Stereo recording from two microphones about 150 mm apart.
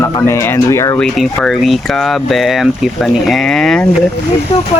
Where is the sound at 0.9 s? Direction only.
Centre (ahead or behind).